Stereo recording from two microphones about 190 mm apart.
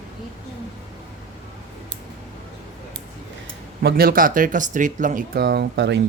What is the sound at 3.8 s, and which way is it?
Speech, 50° right (ahead or behind).